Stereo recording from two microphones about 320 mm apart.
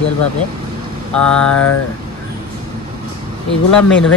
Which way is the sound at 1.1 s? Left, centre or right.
Centre.